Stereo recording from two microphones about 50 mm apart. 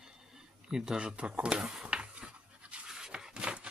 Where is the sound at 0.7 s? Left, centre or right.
Centre.